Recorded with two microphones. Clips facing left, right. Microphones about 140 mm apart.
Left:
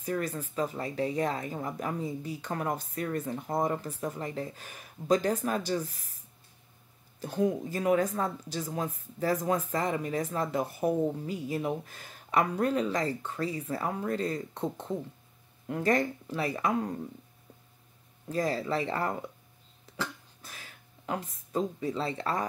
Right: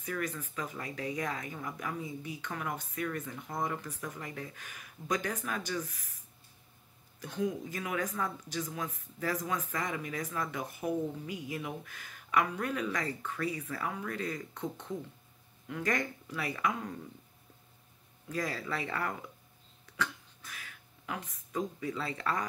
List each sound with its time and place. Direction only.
0.0 s speech: 30° left (ahead or behind)
7.4 s speech: 35° left (ahead or behind)
18.3 s speech: 25° left (ahead or behind)
19.9 s a sound: 30° left (ahead or behind)